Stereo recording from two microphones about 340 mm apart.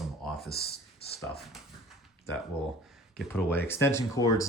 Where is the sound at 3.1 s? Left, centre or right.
Centre.